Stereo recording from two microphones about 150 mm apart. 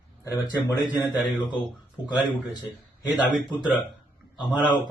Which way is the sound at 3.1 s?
Centre (ahead or behind).